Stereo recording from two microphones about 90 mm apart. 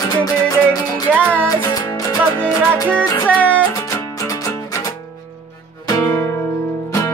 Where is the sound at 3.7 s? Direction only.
35° left (ahead or behind).